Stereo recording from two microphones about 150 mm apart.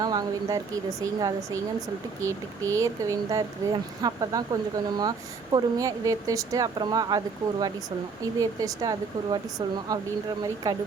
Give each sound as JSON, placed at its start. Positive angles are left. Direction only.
{"t": 0.0, "sound": "speech", "side_deg": -25}
{"t": 8.4, "sound": "speech", "side_deg": -25}